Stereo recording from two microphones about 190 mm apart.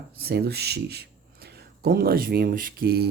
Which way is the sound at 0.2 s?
55° right (ahead or behind).